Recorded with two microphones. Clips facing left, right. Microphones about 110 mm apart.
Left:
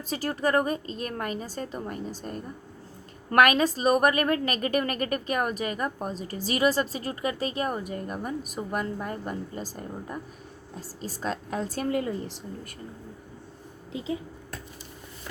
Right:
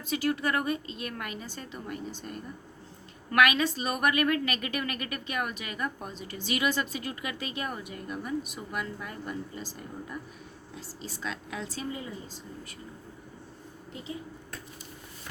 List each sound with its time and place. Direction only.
0.0 s a woman's voice: 40° left (ahead or behind)
11.9 s a woman's voice: 80° left